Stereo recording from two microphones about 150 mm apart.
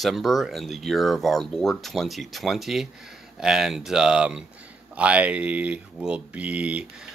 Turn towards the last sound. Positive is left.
turn(degrees=-10)  # may be behind; listen again after turning